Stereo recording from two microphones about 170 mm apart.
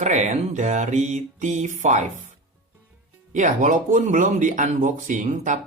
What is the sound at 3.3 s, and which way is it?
Speech, 45° right (ahead or behind).